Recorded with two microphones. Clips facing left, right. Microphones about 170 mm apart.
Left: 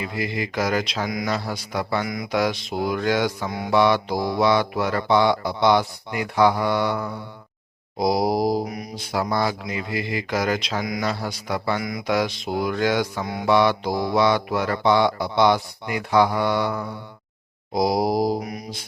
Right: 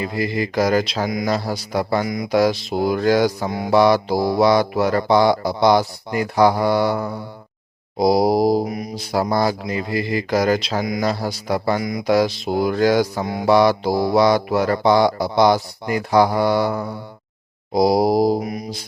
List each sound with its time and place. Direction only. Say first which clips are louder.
0.0 s mantra: right 5 dB; 40° right (ahead or behind)
8.6 s mantra: right 5 dB; 25° right (ahead or behind)
9.0 s mantra: right 4 dB; 35° right (ahead or behind)